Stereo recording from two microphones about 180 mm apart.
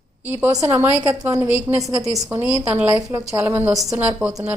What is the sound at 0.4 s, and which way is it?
A woman's voice, 15° right (ahead or behind).